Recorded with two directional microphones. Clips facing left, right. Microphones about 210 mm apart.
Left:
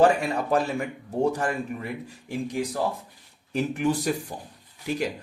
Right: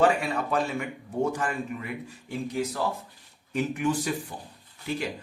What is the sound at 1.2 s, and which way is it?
Speech, 40° left (ahead or behind).